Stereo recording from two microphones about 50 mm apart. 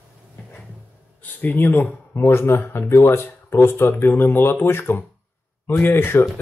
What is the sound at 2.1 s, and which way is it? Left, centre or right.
Speech, left.